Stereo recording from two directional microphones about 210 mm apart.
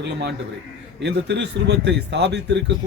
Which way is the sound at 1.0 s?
55° right (ahead or behind).